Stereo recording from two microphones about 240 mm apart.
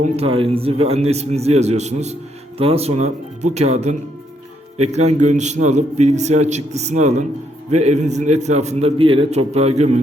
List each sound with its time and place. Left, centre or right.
0.0 s a man's voice: right